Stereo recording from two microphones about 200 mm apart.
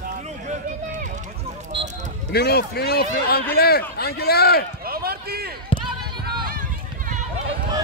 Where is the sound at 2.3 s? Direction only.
55° left (ahead or behind).